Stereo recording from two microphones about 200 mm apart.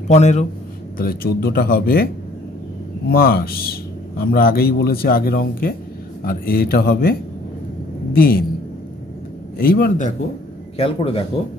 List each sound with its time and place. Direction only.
0.1 s a man's voice: 35° left (ahead or behind)
0.9 s speech: 50° left (ahead or behind)
3.1 s speech: 50° left (ahead or behind)
9.6 s speech: 50° left (ahead or behind)
10.8 s speech: 30° left (ahead or behind)